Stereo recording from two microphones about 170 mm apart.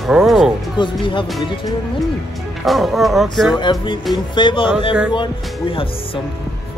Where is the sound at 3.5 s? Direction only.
25° left (ahead or behind).